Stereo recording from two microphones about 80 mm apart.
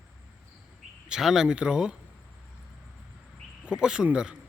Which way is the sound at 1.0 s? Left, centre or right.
Centre.